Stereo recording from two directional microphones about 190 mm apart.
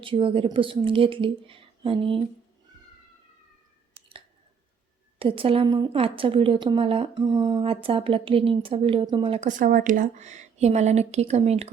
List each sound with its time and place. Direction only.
0.0 s speech: 25° right (ahead or behind)
5.2 s speech: 30° right (ahead or behind)